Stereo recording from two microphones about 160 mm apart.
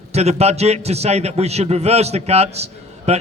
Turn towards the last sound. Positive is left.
turn(degrees=-40)  # may be behind; listen again after turning